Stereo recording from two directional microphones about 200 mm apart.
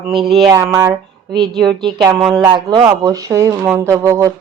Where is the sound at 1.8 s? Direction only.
25° right (ahead or behind).